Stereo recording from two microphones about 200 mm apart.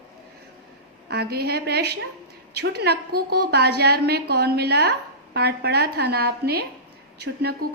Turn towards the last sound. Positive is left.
turn(degrees=-55)  # may be behind; listen again after turning